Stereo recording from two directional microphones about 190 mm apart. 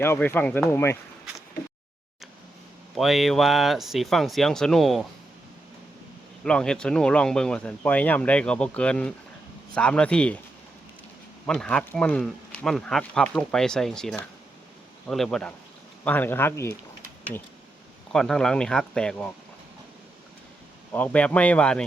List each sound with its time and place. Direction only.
0.0 s speech: 10° left (ahead or behind)
2.9 s speech: centre (ahead or behind)
6.4 s speech: 5° left (ahead or behind)
11.4 s speech: 5° left (ahead or behind)
18.1 s speech: 5° left (ahead or behind)
20.9 s speech: 10° left (ahead or behind)